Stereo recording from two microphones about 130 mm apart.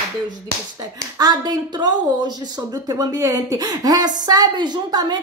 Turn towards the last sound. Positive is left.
turn(degrees=-35)  # may be behind; listen again after turning